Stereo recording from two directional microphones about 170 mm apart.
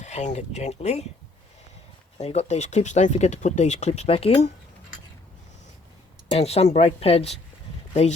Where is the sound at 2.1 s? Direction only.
40° left (ahead or behind).